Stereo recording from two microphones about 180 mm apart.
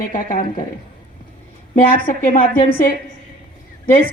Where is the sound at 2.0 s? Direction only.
50° left (ahead or behind).